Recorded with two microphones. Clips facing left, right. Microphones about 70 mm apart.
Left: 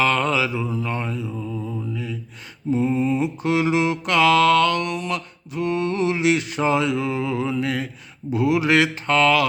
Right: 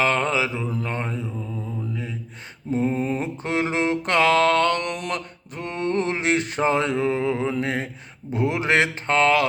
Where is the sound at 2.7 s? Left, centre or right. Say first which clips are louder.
Left 2 dB; right.